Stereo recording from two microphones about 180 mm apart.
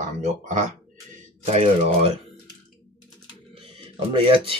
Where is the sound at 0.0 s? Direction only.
40° right (ahead or behind).